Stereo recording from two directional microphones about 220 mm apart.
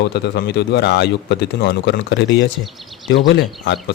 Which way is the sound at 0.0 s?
50° left (ahead or behind).